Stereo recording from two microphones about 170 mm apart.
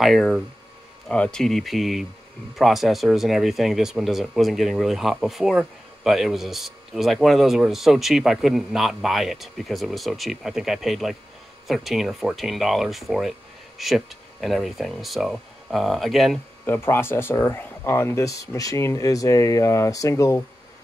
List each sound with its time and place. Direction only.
0.0 s speech: centre (ahead or behind)
16.6 s speech: 10° left (ahead or behind)